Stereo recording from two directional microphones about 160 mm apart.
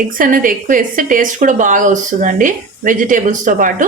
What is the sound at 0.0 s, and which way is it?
A woman's voice, 60° right (ahead or behind).